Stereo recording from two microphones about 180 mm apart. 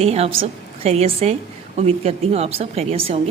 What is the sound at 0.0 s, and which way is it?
A woman's voice, 35° right (ahead or behind).